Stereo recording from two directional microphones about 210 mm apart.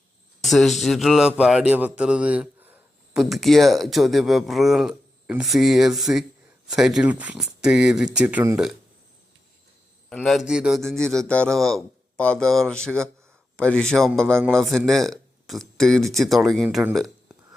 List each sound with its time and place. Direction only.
0.4 s speech: centre (ahead or behind)
10.1 s speech: centre (ahead or behind)